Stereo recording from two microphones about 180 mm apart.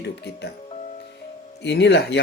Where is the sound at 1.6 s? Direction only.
75° left (ahead or behind).